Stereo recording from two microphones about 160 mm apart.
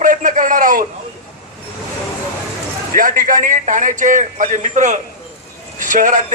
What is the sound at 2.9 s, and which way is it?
A man's voice, 60° right (ahead or behind).